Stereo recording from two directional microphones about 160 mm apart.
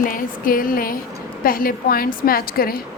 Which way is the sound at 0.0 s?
60° left (ahead or behind).